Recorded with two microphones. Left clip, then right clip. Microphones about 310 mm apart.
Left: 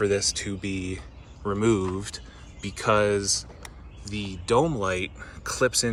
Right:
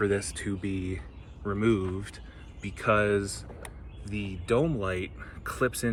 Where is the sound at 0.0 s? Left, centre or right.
Centre.